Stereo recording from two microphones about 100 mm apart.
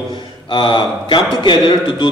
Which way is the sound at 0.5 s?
55° left (ahead or behind).